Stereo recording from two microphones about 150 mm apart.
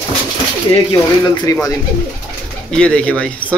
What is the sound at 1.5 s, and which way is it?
Speech, 20° left (ahead or behind).